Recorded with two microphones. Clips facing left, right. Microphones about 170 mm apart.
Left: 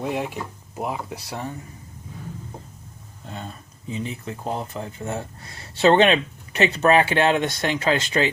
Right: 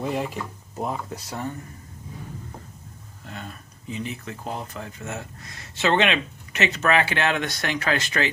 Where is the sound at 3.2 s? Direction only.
30° left (ahead or behind).